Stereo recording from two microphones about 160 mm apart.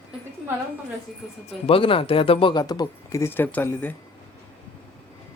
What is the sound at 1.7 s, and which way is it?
Speech, 35° left (ahead or behind).